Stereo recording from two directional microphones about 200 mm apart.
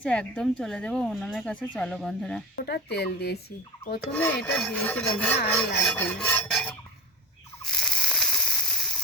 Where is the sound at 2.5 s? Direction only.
55° left (ahead or behind).